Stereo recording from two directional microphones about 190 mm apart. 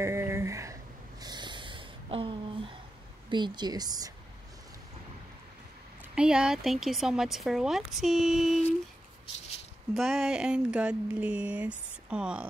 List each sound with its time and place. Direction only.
0.0 s a sound: 15° right (ahead or behind)
3.3 s speech: 25° right (ahead or behind)
6.1 s speech: 5° right (ahead or behind)
9.9 s speech: centre (ahead or behind)